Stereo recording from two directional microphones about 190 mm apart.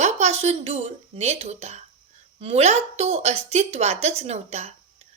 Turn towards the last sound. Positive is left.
turn(degrees=-35)  # may be behind; listen again after turning